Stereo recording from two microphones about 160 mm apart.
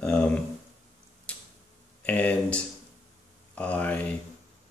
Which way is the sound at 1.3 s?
5° left (ahead or behind).